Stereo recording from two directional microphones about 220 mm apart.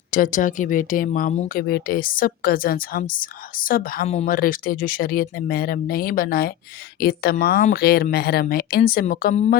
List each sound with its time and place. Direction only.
0.1 s speech: 35° left (ahead or behind)